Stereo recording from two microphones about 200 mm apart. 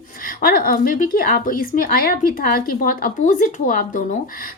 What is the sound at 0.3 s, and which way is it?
Speech, 45° left (ahead or behind).